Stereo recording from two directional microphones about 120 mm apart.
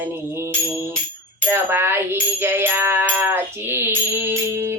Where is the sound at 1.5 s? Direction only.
15° right (ahead or behind).